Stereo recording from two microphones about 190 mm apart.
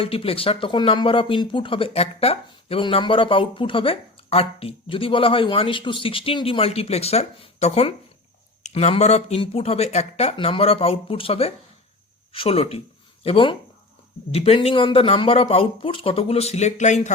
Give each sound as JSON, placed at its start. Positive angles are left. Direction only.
{"t": 0.0, "sound": "speech", "side_deg": 30}